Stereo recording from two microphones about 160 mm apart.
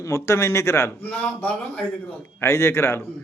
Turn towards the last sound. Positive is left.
turn(degrees=15)  # may be behind; listen again after turning